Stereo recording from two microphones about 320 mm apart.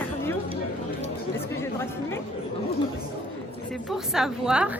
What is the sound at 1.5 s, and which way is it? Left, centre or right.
Speech, centre.